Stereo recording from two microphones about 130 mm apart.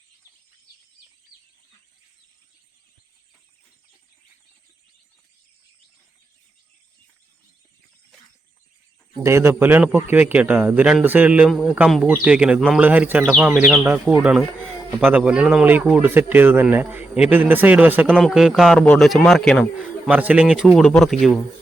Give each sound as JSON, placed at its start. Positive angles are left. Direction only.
{"t": 9.2, "sound": "speech", "side_deg": -20}
{"t": 13.3, "sound": "a man's voice", "side_deg": 0}
{"t": 13.6, "sound": "speech", "side_deg": -10}
{"t": 18.2, "sound": "a man's voice", "side_deg": -5}
{"t": 20.1, "sound": "a man's voice", "side_deg": -10}